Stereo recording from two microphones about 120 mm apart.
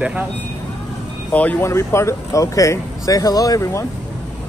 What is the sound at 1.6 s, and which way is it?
Speech, 25° left (ahead or behind).